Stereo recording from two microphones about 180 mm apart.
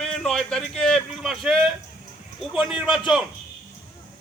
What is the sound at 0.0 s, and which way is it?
A man's voice, centre (ahead or behind).